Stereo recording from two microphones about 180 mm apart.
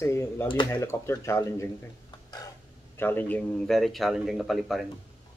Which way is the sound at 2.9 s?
10° left (ahead or behind).